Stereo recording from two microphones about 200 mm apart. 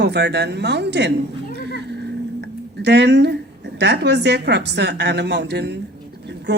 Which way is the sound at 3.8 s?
55° right (ahead or behind).